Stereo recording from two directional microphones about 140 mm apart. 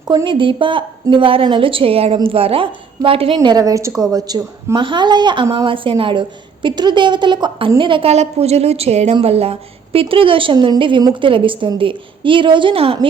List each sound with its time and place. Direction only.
0.1 s a woman's voice: 35° right (ahead or behind)
3.5 s a woman's voice: 25° right (ahead or behind); by 13.1 s 40° right (ahead or behind)